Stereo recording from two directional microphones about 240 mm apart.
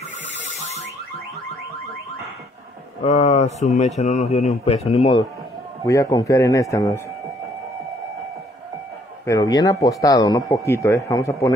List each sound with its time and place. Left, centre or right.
0.4 s a sound: left
3.0 s speech: left
5.9 s a man's voice: centre
9.2 s a man's voice: centre